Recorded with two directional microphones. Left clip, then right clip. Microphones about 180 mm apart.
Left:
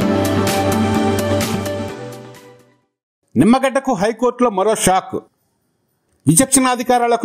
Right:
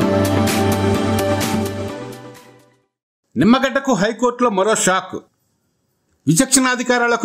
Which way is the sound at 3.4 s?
25° left (ahead or behind).